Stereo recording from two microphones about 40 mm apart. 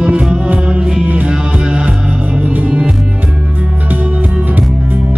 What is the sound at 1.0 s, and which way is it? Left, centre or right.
Music, right.